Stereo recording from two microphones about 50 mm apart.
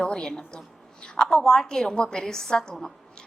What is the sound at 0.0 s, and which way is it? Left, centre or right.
A woman's voice, centre.